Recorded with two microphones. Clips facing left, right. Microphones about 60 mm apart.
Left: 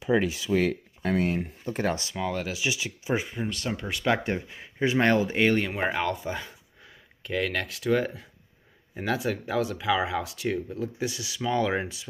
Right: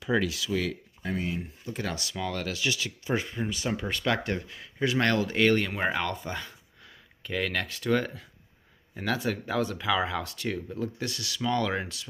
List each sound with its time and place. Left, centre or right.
0.0 s speech: left
1.0 s speech: left
2.0 s speech: centre
3.4 s speech: centre
4.0 s speech: centre
5.8 s speech: centre